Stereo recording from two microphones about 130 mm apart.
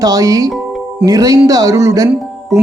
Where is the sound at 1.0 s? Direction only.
25° right (ahead or behind).